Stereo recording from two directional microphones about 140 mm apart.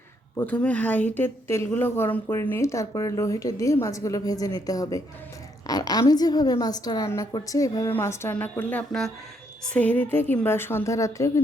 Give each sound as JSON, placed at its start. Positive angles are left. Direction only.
{"t": 0.3, "sound": "a woman's voice", "side_deg": 10}